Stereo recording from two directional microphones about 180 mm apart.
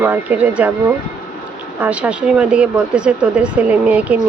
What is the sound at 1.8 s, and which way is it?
Speech, 5° right (ahead or behind).